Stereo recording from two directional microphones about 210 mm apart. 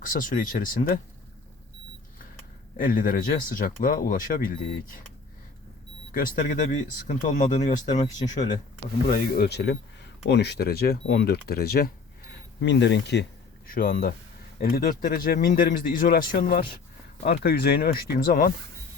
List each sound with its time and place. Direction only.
0.0 s speech: 40° left (ahead or behind)
2.7 s speech: 40° left (ahead or behind)
6.1 s speech: 40° left (ahead or behind)
9.0 s speech: 45° left (ahead or behind)
13.7 s speech: 45° left (ahead or behind)